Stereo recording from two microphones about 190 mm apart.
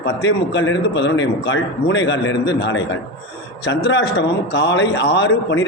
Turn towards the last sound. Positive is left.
turn(degrees=70)  # may be behind; listen again after turning